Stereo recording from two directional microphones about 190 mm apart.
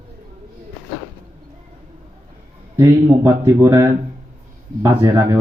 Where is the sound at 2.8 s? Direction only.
20° right (ahead or behind).